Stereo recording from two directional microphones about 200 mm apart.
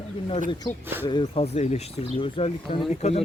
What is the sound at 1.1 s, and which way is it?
Speech, 25° left (ahead or behind).